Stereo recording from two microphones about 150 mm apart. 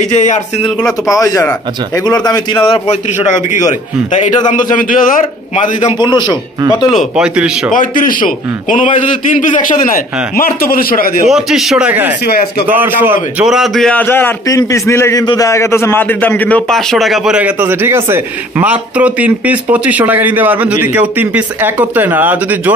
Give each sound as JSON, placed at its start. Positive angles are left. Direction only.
{"t": 0.1, "sound": "speech", "side_deg": 55}
{"t": 1.1, "sound": "a man's voice", "side_deg": 20}
{"t": 4.7, "sound": "a man's voice", "side_deg": 65}
{"t": 5.9, "sound": "a man's voice", "side_deg": 30}
{"t": 7.2, "sound": "a man's voice", "side_deg": -5}
{"t": 7.7, "sound": "a man's voice", "side_deg": 60}
{"t": 11.2, "sound": "a man's voice", "side_deg": -5}
{"t": 13.5, "sound": "a man's voice", "side_deg": 0}
{"t": 14.0, "sound": "a man's voice", "side_deg": 15}